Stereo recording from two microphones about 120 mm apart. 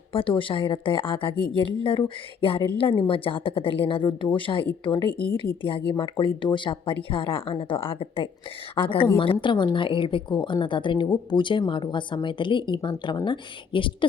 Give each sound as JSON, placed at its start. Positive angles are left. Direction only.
{"t": 0.1, "sound": "a woman's voice", "side_deg": 45}
{"t": 5.1, "sound": "speech", "side_deg": 10}
{"t": 5.4, "sound": "a woman's voice", "side_deg": 45}